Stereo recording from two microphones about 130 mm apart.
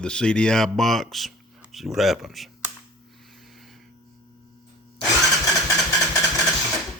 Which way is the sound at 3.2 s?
Centre (ahead or behind).